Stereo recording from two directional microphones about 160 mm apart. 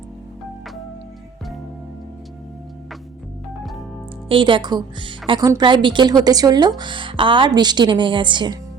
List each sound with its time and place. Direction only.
3.6 s organ: centre (ahead or behind)
4.3 s a woman's voice: 30° right (ahead or behind)